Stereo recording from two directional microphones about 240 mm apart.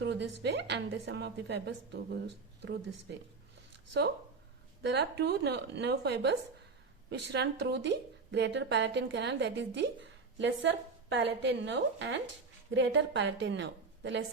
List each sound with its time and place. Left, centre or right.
0.0 s a sound: right
0.4 s a woman's voice: right
4.8 s a woman's voice: right